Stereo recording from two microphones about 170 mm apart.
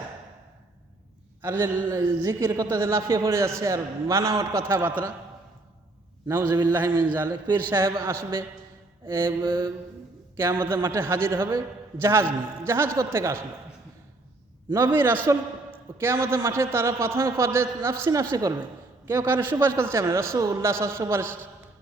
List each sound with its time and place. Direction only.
1.4 s a woman's voice: 15° right (ahead or behind)
6.2 s a man's voice: 15° right (ahead or behind)
6.5 s a woman's voice: 25° right (ahead or behind)
10.3 s a woman's voice: 15° right (ahead or behind)
14.7 s a woman's voice: 15° right (ahead or behind)